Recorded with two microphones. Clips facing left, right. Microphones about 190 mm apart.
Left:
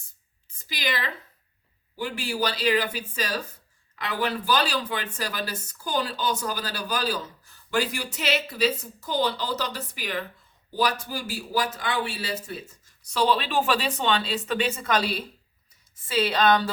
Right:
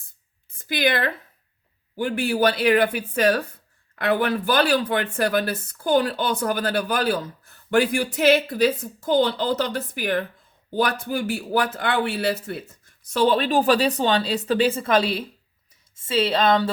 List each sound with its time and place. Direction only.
0.6 s speech: 55° right (ahead or behind); by 16.7 s 25° right (ahead or behind)